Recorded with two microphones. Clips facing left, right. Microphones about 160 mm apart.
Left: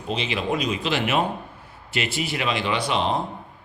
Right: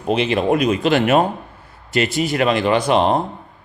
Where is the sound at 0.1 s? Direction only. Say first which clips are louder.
Right 9 dB; 55° right (ahead or behind).